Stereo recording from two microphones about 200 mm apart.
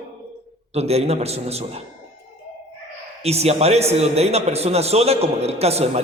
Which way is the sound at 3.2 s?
30° right (ahead or behind).